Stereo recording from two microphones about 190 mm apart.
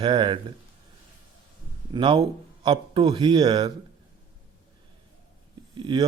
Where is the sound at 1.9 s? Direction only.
25° right (ahead or behind).